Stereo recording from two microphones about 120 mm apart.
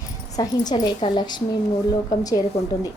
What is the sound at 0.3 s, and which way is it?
A woman's voice, 35° left (ahead or behind).